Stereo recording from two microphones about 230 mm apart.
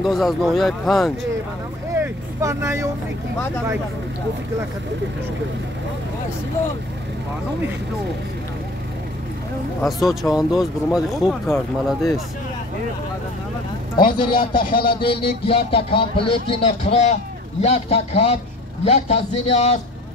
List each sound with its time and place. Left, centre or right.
0.0 s speech: centre
2.0 s vehicle: centre
9.8 s speech: centre
14.1 s a man's voice: centre